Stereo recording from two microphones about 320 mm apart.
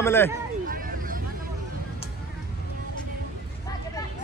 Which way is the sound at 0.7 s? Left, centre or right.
Right.